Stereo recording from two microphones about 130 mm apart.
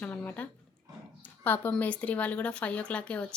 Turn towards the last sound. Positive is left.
turn(degrees=10)  # may be behind; listen again after turning